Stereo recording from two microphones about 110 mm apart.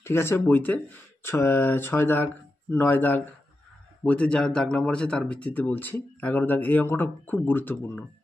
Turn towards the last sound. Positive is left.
turn(degrees=20)  # may be behind; listen again after turning